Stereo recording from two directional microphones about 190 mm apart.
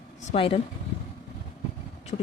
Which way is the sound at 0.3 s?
30° left (ahead or behind).